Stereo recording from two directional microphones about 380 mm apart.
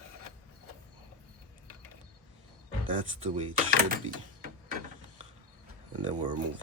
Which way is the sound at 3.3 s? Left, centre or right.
Centre.